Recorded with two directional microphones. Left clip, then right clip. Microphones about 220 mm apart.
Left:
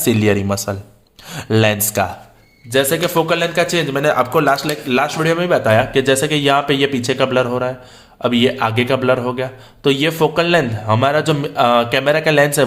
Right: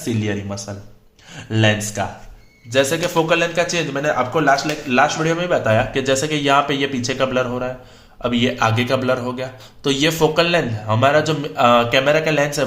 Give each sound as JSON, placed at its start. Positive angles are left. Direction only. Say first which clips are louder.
{"t": 0.0, "sound": "speech", "louder": "left 8 dB", "side_deg": 40}
{"t": 2.7, "sound": "a man's voice", "louder": "left 2 dB", "side_deg": 20}